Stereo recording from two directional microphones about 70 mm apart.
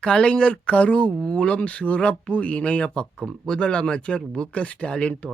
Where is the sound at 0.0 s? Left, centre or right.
Centre.